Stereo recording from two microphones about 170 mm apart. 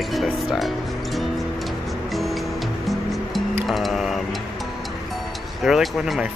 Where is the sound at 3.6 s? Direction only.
Centre (ahead or behind).